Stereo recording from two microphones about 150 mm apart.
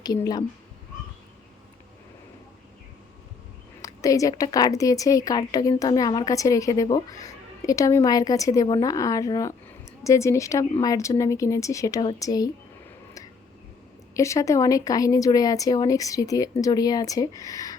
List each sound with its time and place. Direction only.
0.0 s a woman's voice: 25° left (ahead or behind)
3.8 s a woman's voice: 25° left (ahead or behind)
14.1 s a woman's voice: 20° left (ahead or behind)